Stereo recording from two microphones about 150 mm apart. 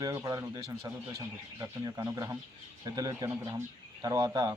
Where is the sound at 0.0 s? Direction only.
25° right (ahead or behind).